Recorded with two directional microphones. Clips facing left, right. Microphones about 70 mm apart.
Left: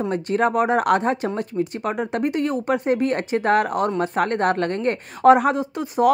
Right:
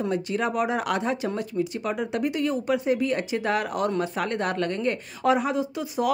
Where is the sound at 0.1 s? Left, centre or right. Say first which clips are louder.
Left 6 dB; left.